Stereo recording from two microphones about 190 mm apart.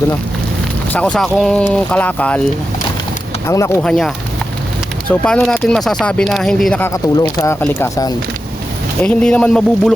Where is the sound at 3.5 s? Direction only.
15° left (ahead or behind).